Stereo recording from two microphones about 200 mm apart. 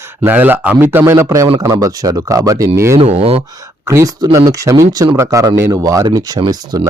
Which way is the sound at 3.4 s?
15° right (ahead or behind).